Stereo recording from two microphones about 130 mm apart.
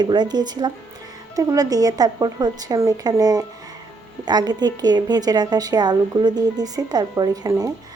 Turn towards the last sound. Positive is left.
turn(degrees=-30)  # may be behind; listen again after turning